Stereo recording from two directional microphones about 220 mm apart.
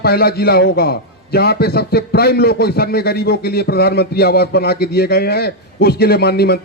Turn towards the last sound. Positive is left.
turn(degrees=45)  # may be behind; listen again after turning